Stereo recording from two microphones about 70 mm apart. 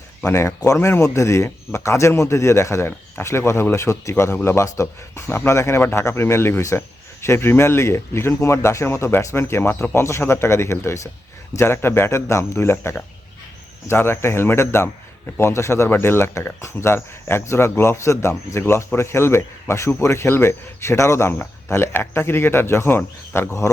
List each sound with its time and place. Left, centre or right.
0.7 s speech: left
15.9 s speech: left